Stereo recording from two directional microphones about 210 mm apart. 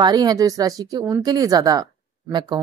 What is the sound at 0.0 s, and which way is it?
Speech, 20° right (ahead or behind).